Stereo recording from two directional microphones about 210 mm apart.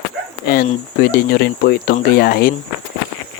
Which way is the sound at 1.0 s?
45° left (ahead or behind).